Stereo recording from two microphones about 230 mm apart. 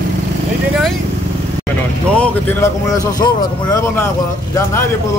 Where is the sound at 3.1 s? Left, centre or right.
Centre.